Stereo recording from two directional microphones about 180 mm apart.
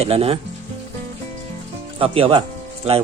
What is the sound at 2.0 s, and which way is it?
Speech, 30° right (ahead or behind).